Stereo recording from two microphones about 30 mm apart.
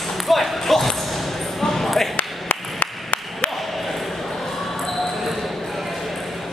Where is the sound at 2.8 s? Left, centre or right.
Left.